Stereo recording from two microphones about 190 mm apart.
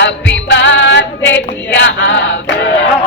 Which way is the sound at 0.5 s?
75° left (ahead or behind).